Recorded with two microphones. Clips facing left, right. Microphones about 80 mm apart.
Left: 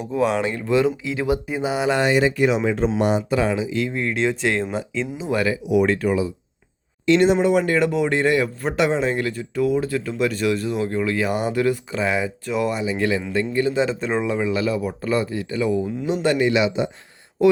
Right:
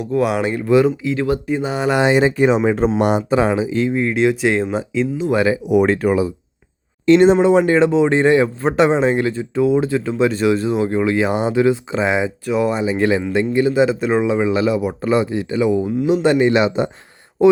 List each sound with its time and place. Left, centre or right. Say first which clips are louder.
0.2 s speech: right 2 dB; centre
0.9 s speech: right 3 dB; centre
2.0 s speech: right 6 dB; right
3.0 s speech: right 3 dB; right
3.2 s speech: right 5 dB; right
3.8 s speech: right 6 dB; centre
5.6 s speech: right 4 dB; right
7.5 s speech: right 6 dB; right
12.7 s speech: right 5 dB; right
13.3 s speech: right 5 dB; centre
16.5 s speech: right 4 dB; right
17.4 s speech: right 4 dB; right